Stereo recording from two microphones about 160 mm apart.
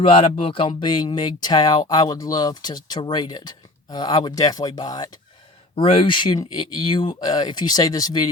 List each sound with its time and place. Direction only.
0.0 s speech: 35° left (ahead or behind)
5.7 s speech: 35° left (ahead or behind)